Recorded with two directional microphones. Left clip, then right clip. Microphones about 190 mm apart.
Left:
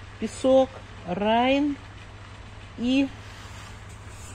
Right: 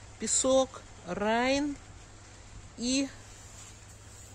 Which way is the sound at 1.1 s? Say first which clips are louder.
Left 6 dB; 30° right (ahead or behind).